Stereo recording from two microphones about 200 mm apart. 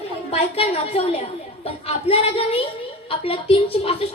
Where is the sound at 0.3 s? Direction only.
30° left (ahead or behind).